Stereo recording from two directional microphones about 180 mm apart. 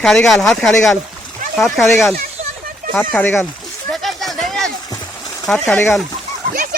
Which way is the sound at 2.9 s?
10° left (ahead or behind).